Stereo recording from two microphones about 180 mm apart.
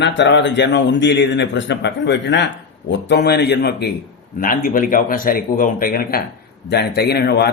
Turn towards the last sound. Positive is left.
turn(degrees=65)  # may be behind; listen again after turning